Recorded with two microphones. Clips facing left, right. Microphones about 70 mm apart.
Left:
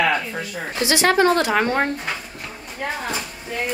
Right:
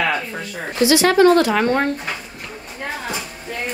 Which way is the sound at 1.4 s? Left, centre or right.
Centre.